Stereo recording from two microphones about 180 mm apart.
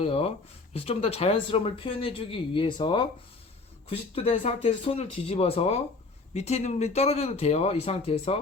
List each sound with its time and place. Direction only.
0.0 s speech: 30° left (ahead or behind)